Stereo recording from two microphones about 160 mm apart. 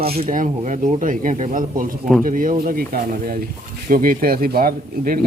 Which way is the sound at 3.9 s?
60° right (ahead or behind).